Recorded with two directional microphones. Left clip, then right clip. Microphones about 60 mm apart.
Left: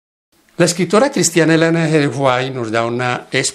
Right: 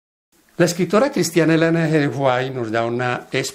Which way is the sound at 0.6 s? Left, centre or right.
Left.